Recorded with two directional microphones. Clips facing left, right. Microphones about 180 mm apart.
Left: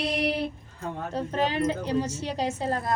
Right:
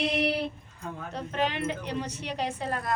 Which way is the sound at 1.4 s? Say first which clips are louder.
Left 3 dB; 40° left (ahead or behind).